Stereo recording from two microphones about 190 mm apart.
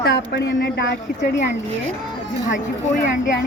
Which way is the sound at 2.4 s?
40° left (ahead or behind).